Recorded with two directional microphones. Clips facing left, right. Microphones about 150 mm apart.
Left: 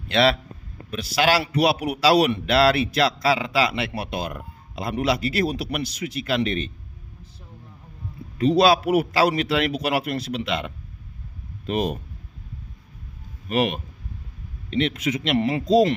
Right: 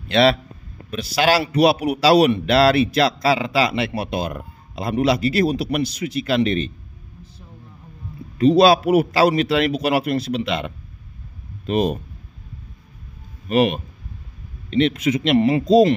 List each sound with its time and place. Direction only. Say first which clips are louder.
0.1 s a man's voice: right 4 dB; 25° right (ahead or behind)
8.4 s a man's voice: right 4 dB; 30° right (ahead or behind)
13.5 s a man's voice: right 5 dB; 25° right (ahead or behind)